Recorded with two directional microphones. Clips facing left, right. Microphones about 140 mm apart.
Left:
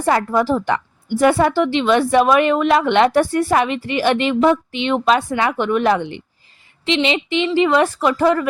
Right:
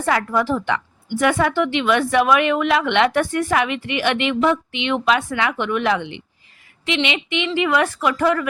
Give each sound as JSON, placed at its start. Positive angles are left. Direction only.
{"t": 0.0, "sound": "a woman's voice", "side_deg": 30}